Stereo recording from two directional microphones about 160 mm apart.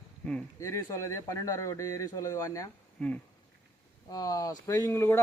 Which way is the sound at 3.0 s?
5° left (ahead or behind).